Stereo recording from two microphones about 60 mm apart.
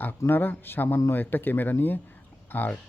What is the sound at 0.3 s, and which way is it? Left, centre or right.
Speech, left.